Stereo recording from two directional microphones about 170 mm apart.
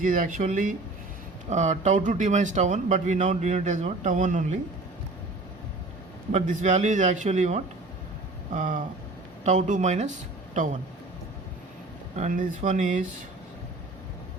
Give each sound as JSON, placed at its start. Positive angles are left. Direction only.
{"t": 0.0, "sound": "speech", "side_deg": -50}
{"t": 6.3, "sound": "speech", "side_deg": -50}
{"t": 12.1, "sound": "speech", "side_deg": -45}